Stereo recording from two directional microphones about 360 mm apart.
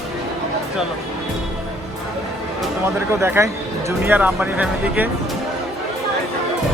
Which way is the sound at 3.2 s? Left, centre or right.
Centre.